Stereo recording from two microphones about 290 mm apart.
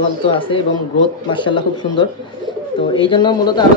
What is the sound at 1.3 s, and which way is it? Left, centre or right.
A man's voice, centre.